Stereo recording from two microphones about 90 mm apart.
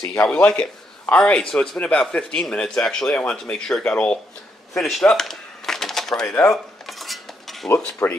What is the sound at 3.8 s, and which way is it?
Speech, 15° left (ahead or behind).